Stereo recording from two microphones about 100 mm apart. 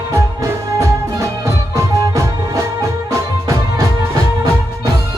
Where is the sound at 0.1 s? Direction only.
30° right (ahead or behind).